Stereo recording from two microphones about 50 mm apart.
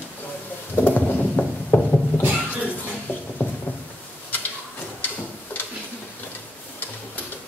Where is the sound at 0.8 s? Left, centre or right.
Left.